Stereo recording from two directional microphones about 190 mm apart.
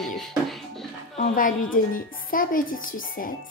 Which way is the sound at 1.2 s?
45° left (ahead or behind).